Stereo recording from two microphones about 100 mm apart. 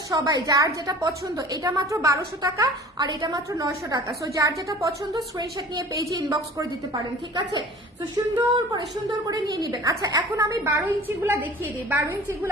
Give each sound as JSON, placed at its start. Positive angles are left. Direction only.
{"t": 0.1, "sound": "a woman's voice", "side_deg": -40}
{"t": 3.0, "sound": "a woman's voice", "side_deg": -45}
{"t": 8.1, "sound": "a woman's voice", "side_deg": -45}
{"t": 10.6, "sound": "a woman's voice", "side_deg": -25}